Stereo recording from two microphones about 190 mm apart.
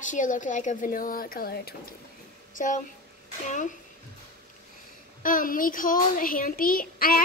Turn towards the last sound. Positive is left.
turn(degrees=50)  # may be behind; listen again after turning